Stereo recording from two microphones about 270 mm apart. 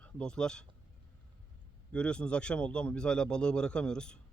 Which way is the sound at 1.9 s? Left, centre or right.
Centre.